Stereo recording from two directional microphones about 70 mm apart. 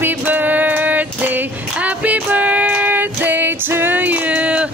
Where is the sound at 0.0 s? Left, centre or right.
Right.